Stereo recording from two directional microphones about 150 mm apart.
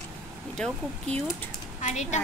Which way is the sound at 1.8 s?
50° left (ahead or behind).